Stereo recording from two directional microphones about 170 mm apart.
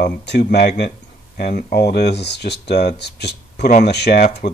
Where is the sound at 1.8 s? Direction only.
75° left (ahead or behind).